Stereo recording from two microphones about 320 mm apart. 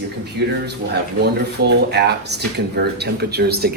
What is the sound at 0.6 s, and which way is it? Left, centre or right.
Speech, right.